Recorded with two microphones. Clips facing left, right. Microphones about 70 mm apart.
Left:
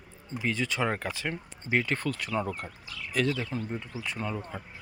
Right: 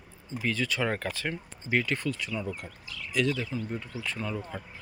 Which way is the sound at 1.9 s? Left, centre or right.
Left.